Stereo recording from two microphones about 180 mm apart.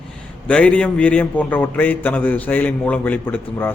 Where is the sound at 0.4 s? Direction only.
5° left (ahead or behind).